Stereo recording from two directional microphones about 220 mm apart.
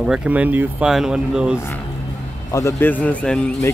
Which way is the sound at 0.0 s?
5° right (ahead or behind).